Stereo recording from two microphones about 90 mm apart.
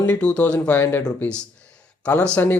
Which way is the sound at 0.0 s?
15° left (ahead or behind).